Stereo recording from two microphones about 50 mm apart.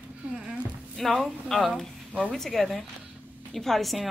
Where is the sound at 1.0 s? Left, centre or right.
Centre.